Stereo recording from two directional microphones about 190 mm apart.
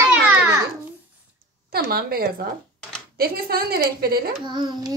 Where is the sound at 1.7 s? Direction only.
55° right (ahead or behind).